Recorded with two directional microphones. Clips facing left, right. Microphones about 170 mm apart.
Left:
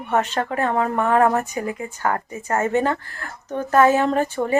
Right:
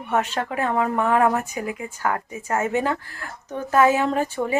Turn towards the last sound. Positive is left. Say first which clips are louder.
# left 2 dB
turn(degrees=-5)  # may be behind; listen again after turning